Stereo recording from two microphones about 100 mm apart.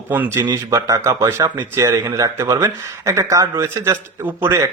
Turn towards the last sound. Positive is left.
turn(degrees=-30)  # may be behind; listen again after turning